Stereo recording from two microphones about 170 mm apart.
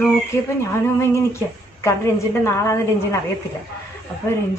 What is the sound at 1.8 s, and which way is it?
A woman's voice, 15° left (ahead or behind).